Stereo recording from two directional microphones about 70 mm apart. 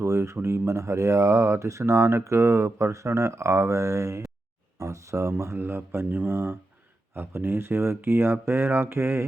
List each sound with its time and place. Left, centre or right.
0.0 s speech: right